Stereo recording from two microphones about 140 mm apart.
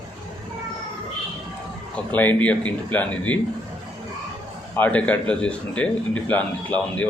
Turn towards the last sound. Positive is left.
turn(degrees=10)  # may be behind; listen again after turning